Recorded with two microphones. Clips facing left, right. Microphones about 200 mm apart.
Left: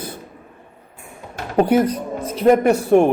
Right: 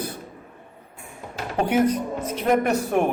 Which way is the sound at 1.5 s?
35° left (ahead or behind).